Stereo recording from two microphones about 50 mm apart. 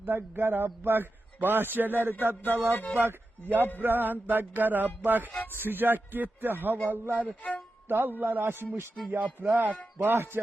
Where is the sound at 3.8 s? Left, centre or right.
Right.